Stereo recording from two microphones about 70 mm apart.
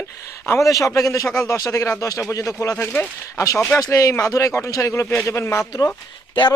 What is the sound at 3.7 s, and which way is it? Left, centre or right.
Speech, left.